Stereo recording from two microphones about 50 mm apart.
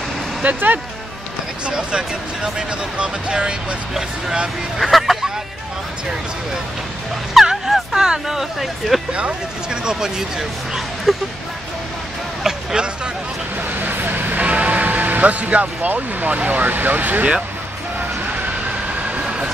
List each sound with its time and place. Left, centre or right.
0.4 s speech: right
1.7 s speech: centre
4.7 s speech: centre
7.3 s speech: centre
9.1 s speech: centre
11.1 s speech: centre
12.4 s speech: centre
13.7 s vehicle: right
14.4 s music: right
15.9 s speech: right
19.2 s vehicle: centre